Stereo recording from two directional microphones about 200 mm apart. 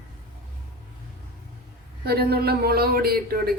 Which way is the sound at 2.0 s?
50° right (ahead or behind).